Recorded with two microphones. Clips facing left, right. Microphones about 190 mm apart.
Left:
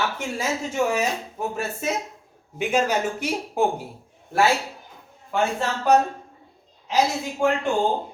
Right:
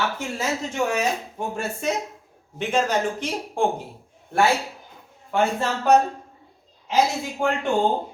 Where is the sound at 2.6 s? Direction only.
10° left (ahead or behind).